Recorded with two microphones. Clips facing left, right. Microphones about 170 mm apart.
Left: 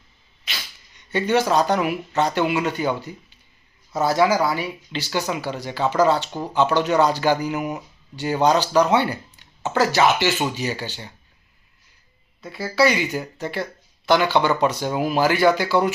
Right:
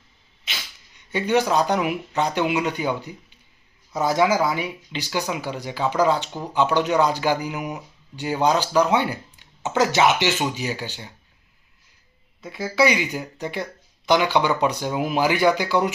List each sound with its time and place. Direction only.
1.1 s speech: 10° right (ahead or behind)
12.4 s speech: 20° right (ahead or behind)